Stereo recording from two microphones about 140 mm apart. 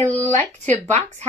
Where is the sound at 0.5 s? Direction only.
55° right (ahead or behind).